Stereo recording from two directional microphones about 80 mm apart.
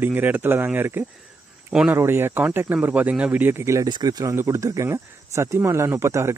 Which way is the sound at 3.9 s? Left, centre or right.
Right.